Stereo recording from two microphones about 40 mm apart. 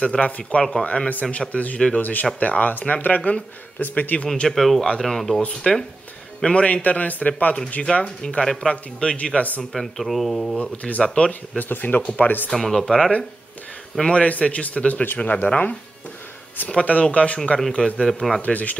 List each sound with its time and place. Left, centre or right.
0.0 s a man's voice: left
3.8 s a man's voice: left
4.5 s speech: centre
5.7 s a man's voice: centre
6.4 s a man's voice: left
7.8 s a man's voice: left
9.7 s speech: centre
10.6 s a man's voice: left
11.5 s speech: left
12.5 s a man's voice: centre
14.4 s a man's voice: left
18.0 s speech: centre
18.4 s a man's voice: left